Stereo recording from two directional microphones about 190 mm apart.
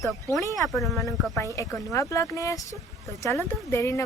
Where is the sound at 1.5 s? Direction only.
15° left (ahead or behind).